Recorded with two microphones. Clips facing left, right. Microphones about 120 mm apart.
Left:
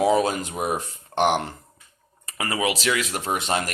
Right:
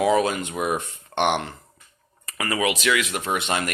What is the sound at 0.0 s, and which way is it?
Speech, 30° left (ahead or behind).